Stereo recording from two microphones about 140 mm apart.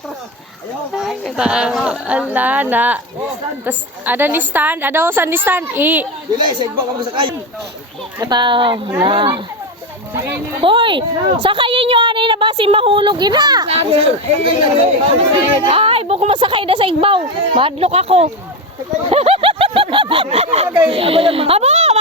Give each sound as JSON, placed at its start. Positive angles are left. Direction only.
{"t": 0.9, "sound": "a woman's voice", "side_deg": 0}
{"t": 6.4, "sound": "a woman's voice", "side_deg": -35}
{"t": 10.6, "sound": "a woman's voice", "side_deg": -35}
{"t": 13.7, "sound": "a woman's voice", "side_deg": -45}
{"t": 19.1, "sound": "a sound", "side_deg": -45}
{"t": 20.9, "sound": "speech", "side_deg": -45}